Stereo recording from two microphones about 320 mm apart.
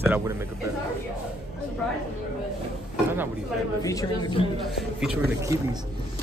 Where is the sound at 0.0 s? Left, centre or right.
Centre.